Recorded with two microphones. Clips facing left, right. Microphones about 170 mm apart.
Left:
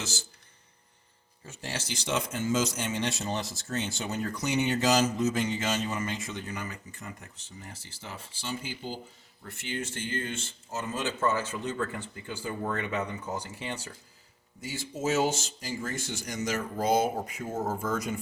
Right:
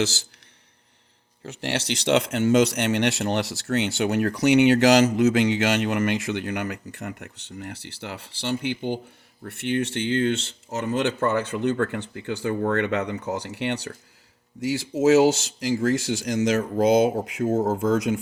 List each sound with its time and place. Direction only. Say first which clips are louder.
0.0 s speech: right 13 dB; 80° right
1.5 s speech: right 10 dB; 75° right (ahead or behind)